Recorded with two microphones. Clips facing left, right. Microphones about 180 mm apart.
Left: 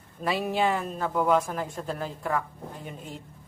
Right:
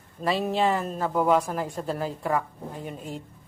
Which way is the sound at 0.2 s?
5° left (ahead or behind).